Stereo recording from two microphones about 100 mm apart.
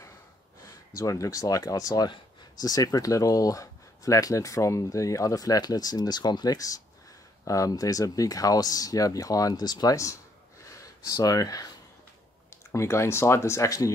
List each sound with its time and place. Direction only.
0.7 s speech: 35° left (ahead or behind)
10.6 s gasp: 30° left (ahead or behind)
12.7 s speech: 30° left (ahead or behind)